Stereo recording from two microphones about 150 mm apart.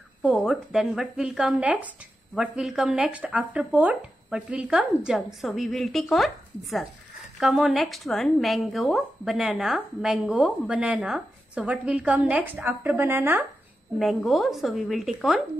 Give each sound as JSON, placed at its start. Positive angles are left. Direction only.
{"t": 0.2, "sound": "a woman's voice", "side_deg": 10}
{"t": 0.5, "sound": "speech", "side_deg": -5}
{"t": 13.9, "sound": "speech", "side_deg": 0}